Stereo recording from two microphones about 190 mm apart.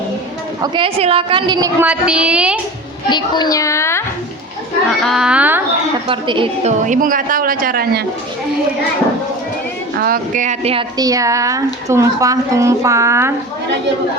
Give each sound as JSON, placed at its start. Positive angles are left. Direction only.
{"t": 0.6, "sound": "a woman's voice", "side_deg": -25}
{"t": 1.8, "sound": "a woman's voice", "side_deg": -5}
{"t": 3.1, "sound": "a child's voice", "side_deg": 25}
{"t": 5.0, "sound": "a woman's voice", "side_deg": 0}
{"t": 6.1, "sound": "a woman's voice", "side_deg": -25}
{"t": 6.8, "sound": "speech", "side_deg": -45}
{"t": 10.0, "sound": "speech", "side_deg": -45}
{"t": 10.9, "sound": "speech", "side_deg": -20}